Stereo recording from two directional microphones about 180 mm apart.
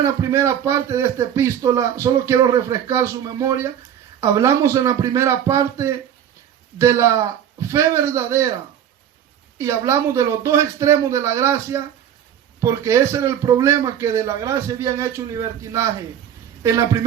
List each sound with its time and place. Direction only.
0.0 s speech: 15° right (ahead or behind)
9.6 s speech: 15° right (ahead or behind)